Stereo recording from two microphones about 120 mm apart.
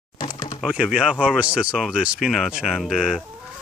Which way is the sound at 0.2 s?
35° left (ahead or behind).